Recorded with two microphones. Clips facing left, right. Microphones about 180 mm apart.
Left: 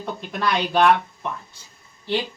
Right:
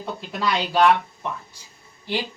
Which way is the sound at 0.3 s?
5° right (ahead or behind).